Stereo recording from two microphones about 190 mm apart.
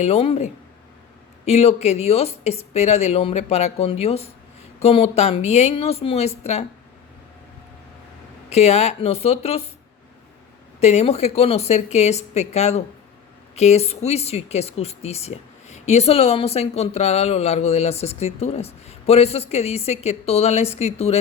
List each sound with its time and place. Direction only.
0.0 s speech: 30° left (ahead or behind)
8.4 s speech: 35° left (ahead or behind)
10.8 s speech: 35° left (ahead or behind)